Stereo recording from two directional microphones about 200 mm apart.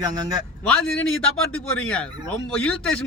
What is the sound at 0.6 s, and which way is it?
A man's voice, 5° left (ahead or behind).